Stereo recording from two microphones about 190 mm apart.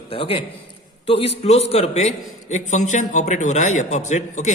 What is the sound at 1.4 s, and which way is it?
A man's voice, 35° left (ahead or behind).